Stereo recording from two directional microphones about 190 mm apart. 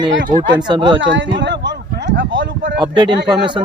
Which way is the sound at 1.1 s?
70° right (ahead or behind).